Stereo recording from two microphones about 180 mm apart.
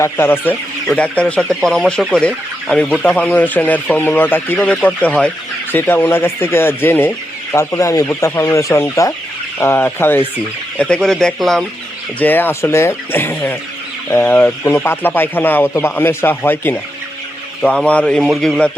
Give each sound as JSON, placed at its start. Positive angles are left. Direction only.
{"t": 0.0, "sound": "a man's voice", "side_deg": 10}